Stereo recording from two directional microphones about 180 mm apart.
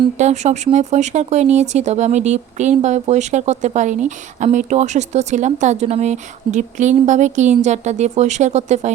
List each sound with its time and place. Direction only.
0.2 s speech: 40° right (ahead or behind)